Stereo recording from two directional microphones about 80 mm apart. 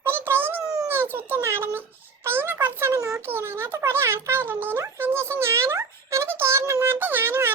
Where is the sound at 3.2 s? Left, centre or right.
Right.